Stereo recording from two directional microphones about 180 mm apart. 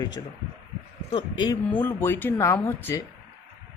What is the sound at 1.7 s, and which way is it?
Speech, 15° left (ahead or behind).